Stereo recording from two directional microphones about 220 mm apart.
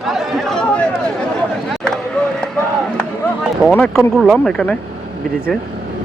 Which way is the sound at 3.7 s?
5° left (ahead or behind).